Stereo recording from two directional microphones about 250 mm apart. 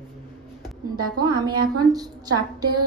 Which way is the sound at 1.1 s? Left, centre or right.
Centre.